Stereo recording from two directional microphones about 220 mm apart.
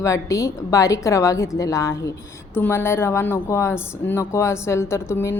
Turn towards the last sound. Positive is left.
turn(degrees=10)  # may be behind; listen again after turning